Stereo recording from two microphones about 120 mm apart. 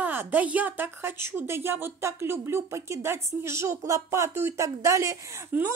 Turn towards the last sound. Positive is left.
turn(degrees=-25)  # may be behind; listen again after turning